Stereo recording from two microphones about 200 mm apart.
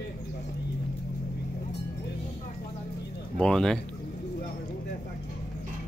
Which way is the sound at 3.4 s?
5° left (ahead or behind).